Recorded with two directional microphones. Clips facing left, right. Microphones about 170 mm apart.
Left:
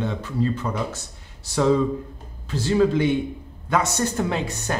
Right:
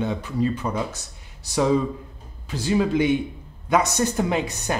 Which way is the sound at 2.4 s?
15° right (ahead or behind).